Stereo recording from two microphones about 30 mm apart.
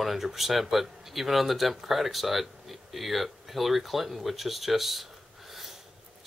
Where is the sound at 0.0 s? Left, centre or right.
Centre.